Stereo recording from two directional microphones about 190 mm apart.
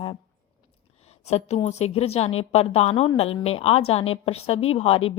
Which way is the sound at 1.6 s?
35° left (ahead or behind).